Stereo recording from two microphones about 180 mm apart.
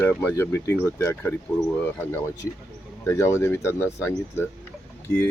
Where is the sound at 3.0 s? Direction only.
15° left (ahead or behind).